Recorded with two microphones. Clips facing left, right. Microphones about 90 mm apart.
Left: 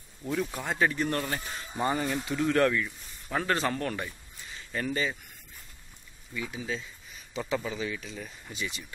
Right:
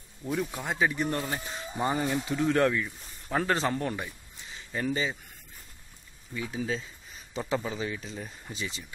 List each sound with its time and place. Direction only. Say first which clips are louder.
0.3 s speech: even; 10° right (ahead or behind)
6.5 s speech: right 3 dB; 35° right (ahead or behind)